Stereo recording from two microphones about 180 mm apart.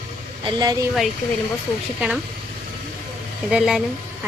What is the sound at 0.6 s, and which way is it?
Speech, 20° right (ahead or behind).